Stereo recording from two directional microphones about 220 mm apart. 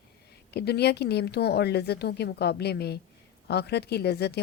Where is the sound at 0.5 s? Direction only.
50° left (ahead or behind).